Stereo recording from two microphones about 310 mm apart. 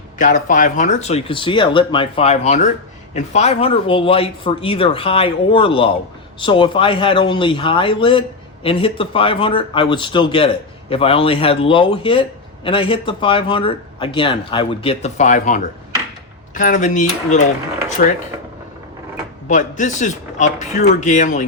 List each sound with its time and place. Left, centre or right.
0.2 s speech: left
19.5 s speech: left